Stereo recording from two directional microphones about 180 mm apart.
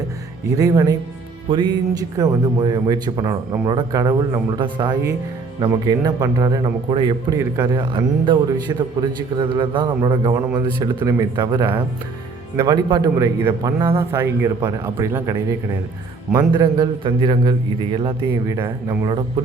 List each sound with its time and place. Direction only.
0.5 s a man's voice: 20° right (ahead or behind)
18.5 s a man's voice: 15° right (ahead or behind)